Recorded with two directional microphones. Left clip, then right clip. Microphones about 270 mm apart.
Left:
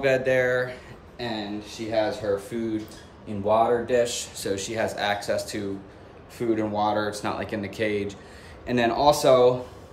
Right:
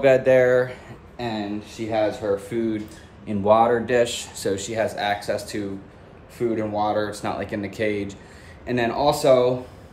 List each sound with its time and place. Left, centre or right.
0.0 s speech: centre
4.4 s speech: centre